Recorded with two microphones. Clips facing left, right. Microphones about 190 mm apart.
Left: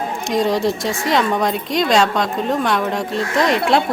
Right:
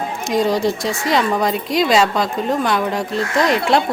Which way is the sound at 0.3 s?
Centre (ahead or behind).